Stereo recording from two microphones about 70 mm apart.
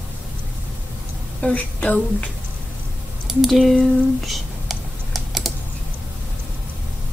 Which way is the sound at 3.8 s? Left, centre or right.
Centre.